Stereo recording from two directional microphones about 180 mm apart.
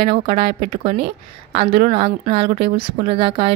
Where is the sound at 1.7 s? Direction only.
60° right (ahead or behind).